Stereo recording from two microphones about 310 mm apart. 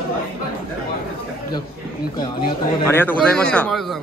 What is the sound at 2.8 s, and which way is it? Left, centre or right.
Speech, centre.